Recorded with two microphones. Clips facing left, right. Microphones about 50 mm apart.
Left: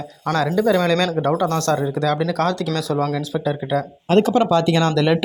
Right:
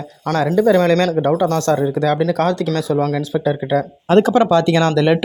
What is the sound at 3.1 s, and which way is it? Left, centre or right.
Speech, right.